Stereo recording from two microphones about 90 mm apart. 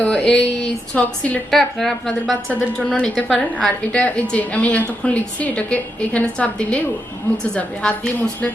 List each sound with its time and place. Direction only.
0.0 s a sound: 10° left (ahead or behind)
0.9 s a woman's voice: 15° left (ahead or behind)
1.5 s a woman's voice: 5° left (ahead or behind)